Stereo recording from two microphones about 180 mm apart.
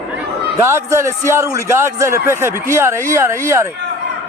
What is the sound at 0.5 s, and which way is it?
Speech, 15° right (ahead or behind).